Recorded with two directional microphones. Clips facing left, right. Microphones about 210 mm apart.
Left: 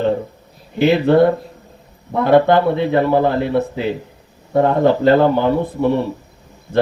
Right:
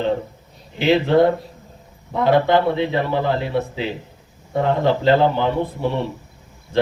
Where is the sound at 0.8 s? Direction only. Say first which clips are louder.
Left 4 dB; 60° left (ahead or behind).